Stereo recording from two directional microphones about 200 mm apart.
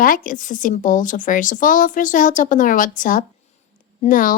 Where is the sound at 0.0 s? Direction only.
45° left (ahead or behind).